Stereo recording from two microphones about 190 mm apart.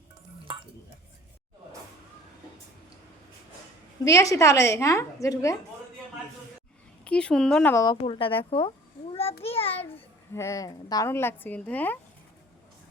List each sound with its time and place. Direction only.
4.0 s a woman's voice: 15° left (ahead or behind)
7.0 s speech: 5° left (ahead or behind)
7.9 s speech: 25° left (ahead or behind)
9.4 s child singing: 30° left (ahead or behind)
10.3 s a woman's voice: 15° left (ahead or behind)